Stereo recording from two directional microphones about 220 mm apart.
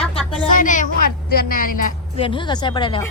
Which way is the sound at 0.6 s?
35° left (ahead or behind).